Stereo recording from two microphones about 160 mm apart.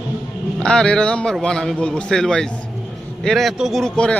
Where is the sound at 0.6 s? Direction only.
5° left (ahead or behind).